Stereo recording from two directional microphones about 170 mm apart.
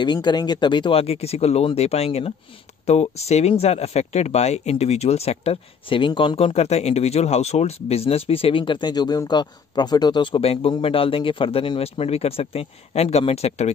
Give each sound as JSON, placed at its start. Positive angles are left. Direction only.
{"t": 0.0, "sound": "speech", "side_deg": 25}